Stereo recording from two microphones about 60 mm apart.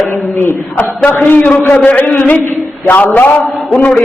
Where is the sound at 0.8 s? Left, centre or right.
Left.